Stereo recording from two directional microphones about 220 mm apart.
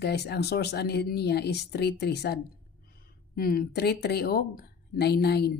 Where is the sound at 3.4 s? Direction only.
40° left (ahead or behind).